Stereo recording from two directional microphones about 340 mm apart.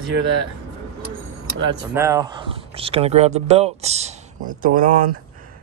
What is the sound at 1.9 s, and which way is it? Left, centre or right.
Speech, centre.